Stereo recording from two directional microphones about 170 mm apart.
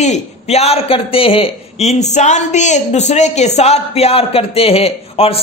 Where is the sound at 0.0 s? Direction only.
40° left (ahead or behind).